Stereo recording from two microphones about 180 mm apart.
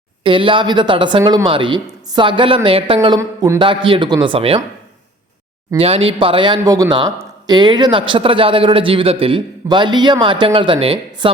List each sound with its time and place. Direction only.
0.2 s speech: 30° right (ahead or behind)
3.2 s a man's voice: 15° right (ahead or behind)
3.6 s speech: 30° right (ahead or behind)
5.7 s speech: 30° right (ahead or behind)